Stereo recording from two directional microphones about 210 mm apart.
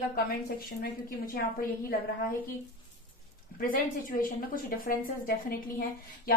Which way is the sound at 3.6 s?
40° left (ahead or behind).